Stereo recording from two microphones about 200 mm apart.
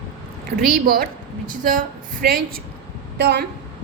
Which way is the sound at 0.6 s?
50° right (ahead or behind).